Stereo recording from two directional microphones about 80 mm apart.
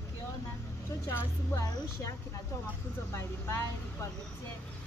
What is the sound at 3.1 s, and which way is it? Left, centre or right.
Speech, left.